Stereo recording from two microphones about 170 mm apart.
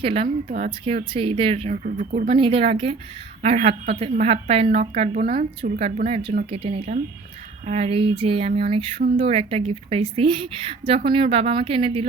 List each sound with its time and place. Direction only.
0.0 s speech: 35° right (ahead or behind)
0.4 s speech: 45° right (ahead or behind)
1.7 s speech: 50° right (ahead or behind)
2.2 s speech: 30° right (ahead or behind)